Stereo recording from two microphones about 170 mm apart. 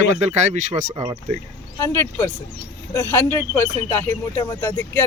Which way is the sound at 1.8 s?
15° left (ahead or behind).